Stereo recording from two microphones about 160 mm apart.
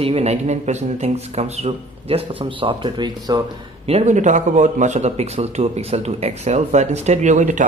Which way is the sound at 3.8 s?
45° right (ahead or behind).